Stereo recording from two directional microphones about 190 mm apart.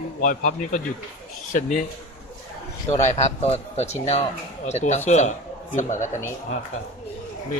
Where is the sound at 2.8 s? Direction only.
35° left (ahead or behind).